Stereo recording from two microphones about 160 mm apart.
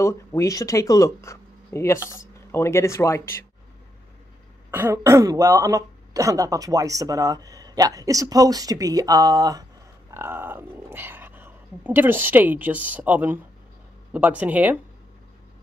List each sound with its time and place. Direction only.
0.0 s speech: 20° left (ahead or behind)
4.6 s speech: 15° right (ahead or behind)